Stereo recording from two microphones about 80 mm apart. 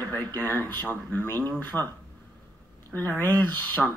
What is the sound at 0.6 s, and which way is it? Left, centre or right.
Speech, left.